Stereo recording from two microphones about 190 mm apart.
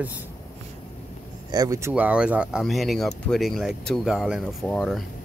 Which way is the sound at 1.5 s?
20° right (ahead or behind).